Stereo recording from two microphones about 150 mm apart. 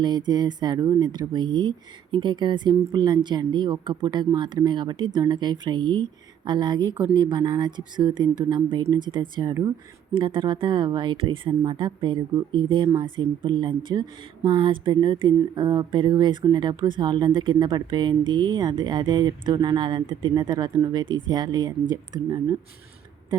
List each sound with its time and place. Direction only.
0.0 s speech: 30° right (ahead or behind)